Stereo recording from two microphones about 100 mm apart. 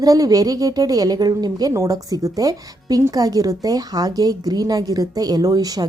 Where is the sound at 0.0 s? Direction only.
40° right (ahead or behind).